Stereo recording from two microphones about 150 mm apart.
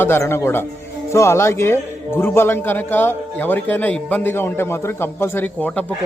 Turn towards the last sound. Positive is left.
turn(degrees=10)  # may be behind; listen again after turning